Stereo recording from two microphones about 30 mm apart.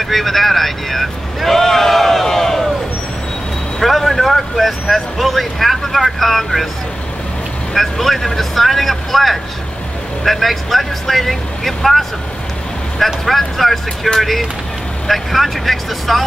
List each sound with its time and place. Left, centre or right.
0.0 s speech: centre
2.2 s crowd: centre
3.8 s speech: centre
7.7 s speech: centre